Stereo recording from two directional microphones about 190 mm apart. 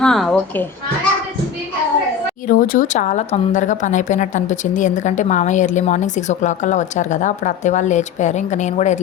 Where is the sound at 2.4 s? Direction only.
45° left (ahead or behind).